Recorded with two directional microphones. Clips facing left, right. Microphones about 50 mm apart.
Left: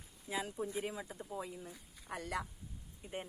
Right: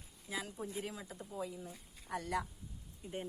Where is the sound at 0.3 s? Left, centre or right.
Centre.